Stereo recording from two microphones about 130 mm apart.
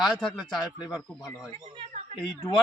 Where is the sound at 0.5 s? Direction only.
30° left (ahead or behind).